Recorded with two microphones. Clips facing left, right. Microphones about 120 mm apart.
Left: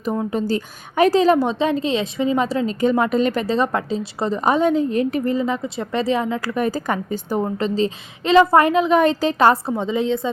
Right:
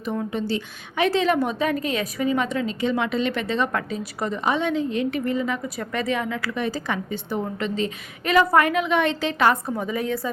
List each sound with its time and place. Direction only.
0.0 s a woman's voice: 40° left (ahead or behind); by 10.3 s 25° left (ahead or behind)